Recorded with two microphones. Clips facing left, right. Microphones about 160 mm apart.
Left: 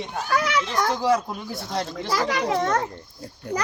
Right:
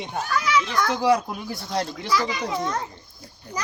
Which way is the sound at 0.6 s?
30° left (ahead or behind).